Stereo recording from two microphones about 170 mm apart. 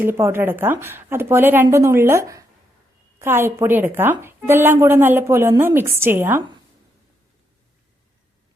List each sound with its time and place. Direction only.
0.0 s a woman's voice: 15° right (ahead or behind)